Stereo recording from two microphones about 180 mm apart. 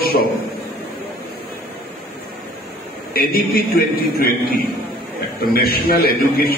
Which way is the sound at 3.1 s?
55° left (ahead or behind).